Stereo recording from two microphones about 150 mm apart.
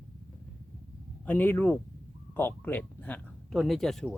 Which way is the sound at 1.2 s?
15° left (ahead or behind).